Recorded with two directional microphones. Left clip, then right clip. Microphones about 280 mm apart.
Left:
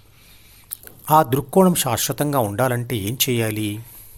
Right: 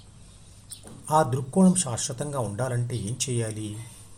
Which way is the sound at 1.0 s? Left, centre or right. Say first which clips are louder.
Left 7 dB; left.